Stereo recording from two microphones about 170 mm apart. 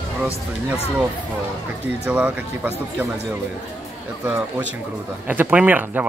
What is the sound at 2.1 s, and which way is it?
Speech, 10° right (ahead or behind).